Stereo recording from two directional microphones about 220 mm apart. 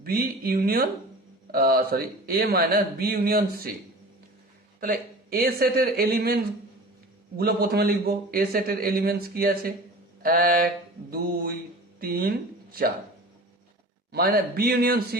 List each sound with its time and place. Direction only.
0.0 s a man's voice: 40° right (ahead or behind)
4.8 s a man's voice: 40° right (ahead or behind)
10.2 s a sound: 40° right (ahead or behind)
11.9 s speech: 40° right (ahead or behind)
14.1 s a man's voice: 45° right (ahead or behind)